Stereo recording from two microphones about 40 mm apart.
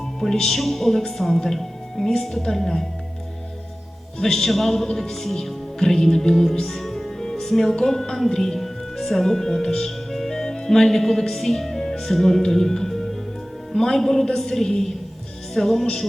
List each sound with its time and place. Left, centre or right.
0.2 s a woman's voice: centre
4.2 s a woman's voice: centre